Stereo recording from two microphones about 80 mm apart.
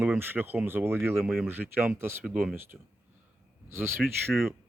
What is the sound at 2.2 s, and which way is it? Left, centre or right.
Speech, centre.